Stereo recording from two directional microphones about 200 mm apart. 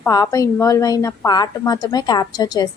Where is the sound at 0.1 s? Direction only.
15° left (ahead or behind).